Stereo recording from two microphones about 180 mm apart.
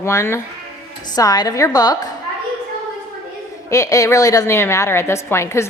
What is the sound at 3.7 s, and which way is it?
A woman's voice, 15° left (ahead or behind).